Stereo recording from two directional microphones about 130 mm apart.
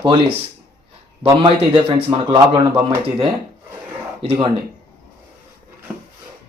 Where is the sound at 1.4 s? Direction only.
40° right (ahead or behind).